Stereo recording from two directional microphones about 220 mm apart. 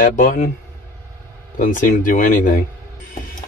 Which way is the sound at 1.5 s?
40° left (ahead or behind).